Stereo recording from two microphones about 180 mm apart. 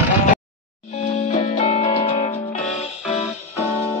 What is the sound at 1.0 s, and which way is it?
Music, 25° left (ahead or behind).